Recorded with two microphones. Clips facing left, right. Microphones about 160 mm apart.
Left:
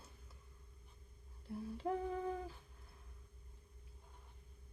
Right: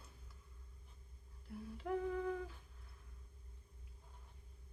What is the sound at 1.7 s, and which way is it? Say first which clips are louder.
Humming: right 1 dB; 30° left (ahead or behind).